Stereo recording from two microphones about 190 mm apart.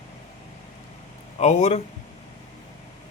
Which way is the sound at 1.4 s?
35° left (ahead or behind).